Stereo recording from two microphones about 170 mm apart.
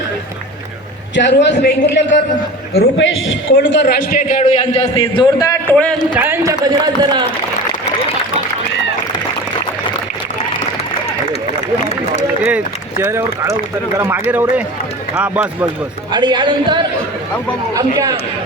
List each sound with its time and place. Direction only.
1.1 s a man's voice: 90° left
4.2 s a man's voice: 45° left (ahead or behind)
5.4 s a man's voice: 20° left (ahead or behind)
6.1 s a man's voice: 15° right (ahead or behind)
12.4 s a man's voice: 10° right (ahead or behind)
16.1 s a man's voice: 25° right (ahead or behind)
17.7 s a man's voice: 20° right (ahead or behind)